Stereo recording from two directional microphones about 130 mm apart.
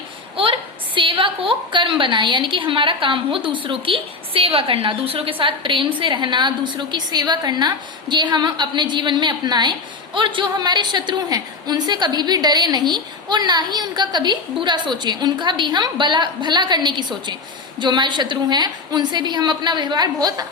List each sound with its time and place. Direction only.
0.3 s a woman's voice: 45° right (ahead or behind)